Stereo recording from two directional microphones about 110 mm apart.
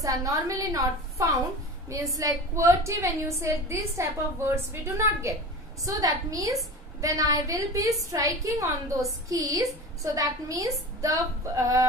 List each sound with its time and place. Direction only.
0.0 s a woman's voice: 30° right (ahead or behind)